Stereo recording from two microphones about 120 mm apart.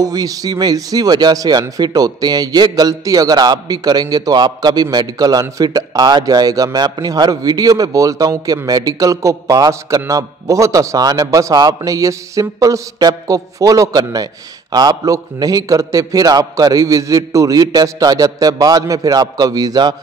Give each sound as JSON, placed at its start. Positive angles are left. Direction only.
{"t": 0.0, "sound": "speech", "side_deg": -30}